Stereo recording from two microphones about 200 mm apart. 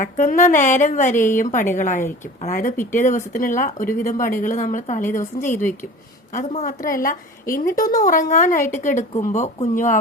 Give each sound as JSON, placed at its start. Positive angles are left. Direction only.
{"t": 0.0, "sound": "a woman's voice", "side_deg": 40}